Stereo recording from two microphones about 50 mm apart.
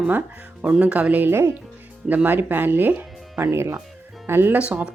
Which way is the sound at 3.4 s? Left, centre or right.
Right.